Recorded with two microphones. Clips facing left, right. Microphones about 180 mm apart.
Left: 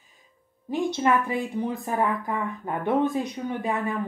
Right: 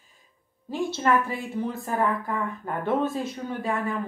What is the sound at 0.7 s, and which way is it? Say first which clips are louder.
A woman's voice: left 1 dB; 15° left (ahead or behind).